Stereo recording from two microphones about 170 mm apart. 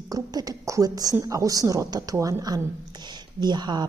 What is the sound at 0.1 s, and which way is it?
A woman's voice, 20° right (ahead or behind).